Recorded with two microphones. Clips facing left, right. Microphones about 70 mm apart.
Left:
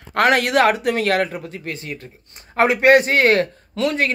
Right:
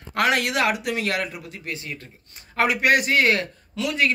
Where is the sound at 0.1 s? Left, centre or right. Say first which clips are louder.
Left 6 dB; left.